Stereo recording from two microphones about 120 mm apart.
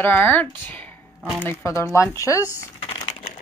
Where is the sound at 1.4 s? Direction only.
25° left (ahead or behind).